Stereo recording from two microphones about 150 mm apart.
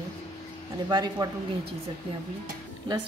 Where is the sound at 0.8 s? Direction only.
30° right (ahead or behind).